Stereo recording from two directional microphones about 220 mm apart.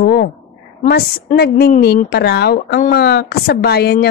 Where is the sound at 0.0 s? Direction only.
50° left (ahead or behind).